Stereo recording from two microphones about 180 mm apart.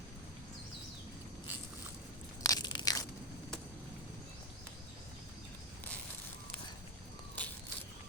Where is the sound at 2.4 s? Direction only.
20° left (ahead or behind).